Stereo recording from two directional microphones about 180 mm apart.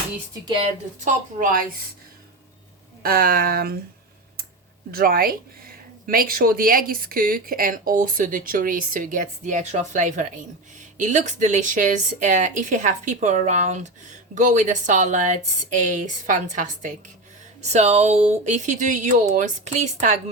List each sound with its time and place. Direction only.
0.4 s a woman's voice: 25° right (ahead or behind)
0.9 s speech: 45° right (ahead or behind)
3.0 s speech: 55° right (ahead or behind)
4.9 s speech: 55° right (ahead or behind)